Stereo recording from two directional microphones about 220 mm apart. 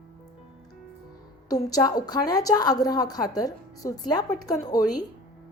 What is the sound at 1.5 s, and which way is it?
A woman's voice, 15° left (ahead or behind).